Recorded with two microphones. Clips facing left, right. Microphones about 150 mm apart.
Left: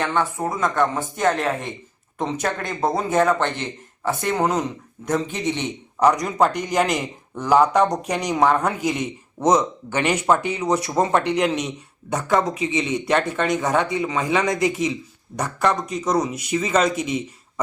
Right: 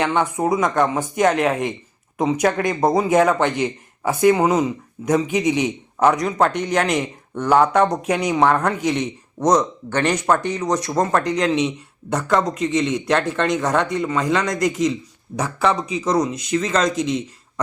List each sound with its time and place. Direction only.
0.0 s a man's voice: 15° right (ahead or behind); by 17.2 s 5° left (ahead or behind)